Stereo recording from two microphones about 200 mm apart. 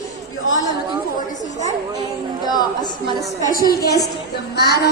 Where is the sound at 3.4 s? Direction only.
45° left (ahead or behind).